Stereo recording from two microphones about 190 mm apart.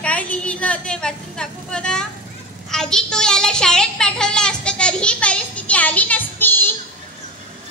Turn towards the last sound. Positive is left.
turn(degrees=10)  # may be behind; listen again after turning